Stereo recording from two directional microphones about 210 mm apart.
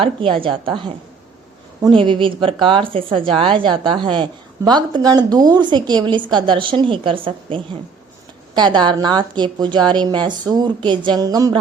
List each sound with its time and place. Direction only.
0.0 s a woman's voice: 25° right (ahead or behind)